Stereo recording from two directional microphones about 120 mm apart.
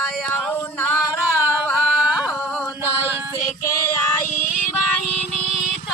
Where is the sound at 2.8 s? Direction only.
20° right (ahead or behind).